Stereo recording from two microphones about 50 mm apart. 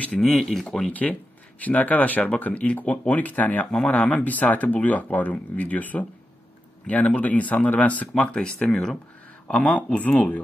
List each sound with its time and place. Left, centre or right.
0.4 s speech: centre
0.8 s speech: left
8.2 s speech: centre
9.6 s speech: left